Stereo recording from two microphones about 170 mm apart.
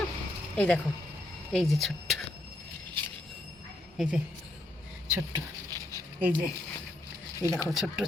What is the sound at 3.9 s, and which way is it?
Speech, 5° right (ahead or behind).